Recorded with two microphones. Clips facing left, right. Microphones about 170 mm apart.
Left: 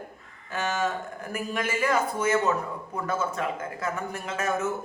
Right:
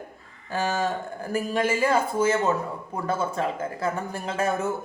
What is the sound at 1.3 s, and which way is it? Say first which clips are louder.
A man's voice: right 5 dB; 30° right (ahead or behind).